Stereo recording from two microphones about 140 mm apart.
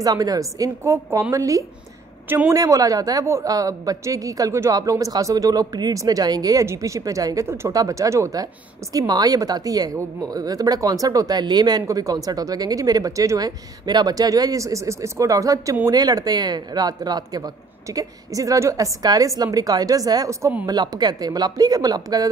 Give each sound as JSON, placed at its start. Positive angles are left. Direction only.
{"t": 0.0, "sound": "a woman's voice", "side_deg": -25}
{"t": 2.5, "sound": "a woman's voice", "side_deg": -25}